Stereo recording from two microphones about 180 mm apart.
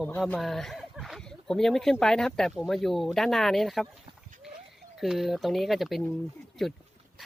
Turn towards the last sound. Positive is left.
turn(degrees=0)  # may be behind; listen again after turning